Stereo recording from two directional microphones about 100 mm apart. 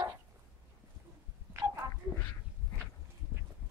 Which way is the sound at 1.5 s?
25° right (ahead or behind).